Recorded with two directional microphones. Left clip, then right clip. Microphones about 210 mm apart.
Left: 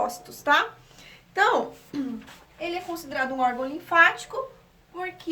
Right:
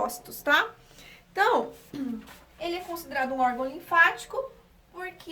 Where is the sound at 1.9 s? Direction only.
5° left (ahead or behind).